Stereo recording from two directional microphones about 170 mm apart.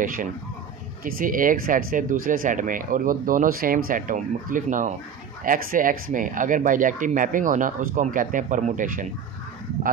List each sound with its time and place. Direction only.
0.0 s speech: 55° right (ahead or behind)